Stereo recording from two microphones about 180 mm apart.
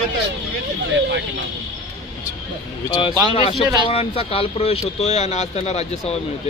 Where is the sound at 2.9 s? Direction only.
25° left (ahead or behind).